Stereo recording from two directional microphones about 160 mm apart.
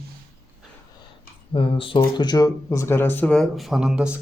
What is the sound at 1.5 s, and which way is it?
Speech, 35° left (ahead or behind).